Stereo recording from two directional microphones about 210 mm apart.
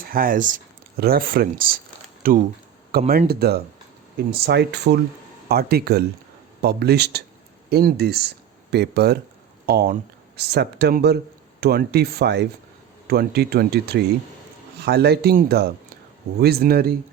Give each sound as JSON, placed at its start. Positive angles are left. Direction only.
{"t": 0.0, "sound": "speech", "side_deg": -45}